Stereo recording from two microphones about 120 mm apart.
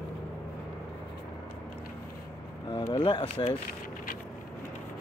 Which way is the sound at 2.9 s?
40° left (ahead or behind).